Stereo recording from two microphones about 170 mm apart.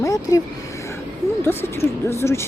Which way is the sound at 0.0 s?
20° left (ahead or behind).